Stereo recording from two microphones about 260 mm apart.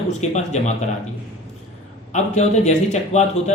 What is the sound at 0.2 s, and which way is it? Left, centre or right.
Speech, left.